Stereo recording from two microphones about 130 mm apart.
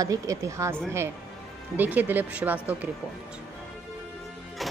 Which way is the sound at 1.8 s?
15° right (ahead or behind).